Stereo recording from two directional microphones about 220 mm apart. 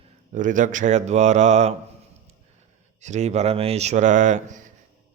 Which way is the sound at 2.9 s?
30° right (ahead or behind).